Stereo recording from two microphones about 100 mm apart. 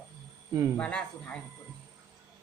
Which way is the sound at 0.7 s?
10° left (ahead or behind).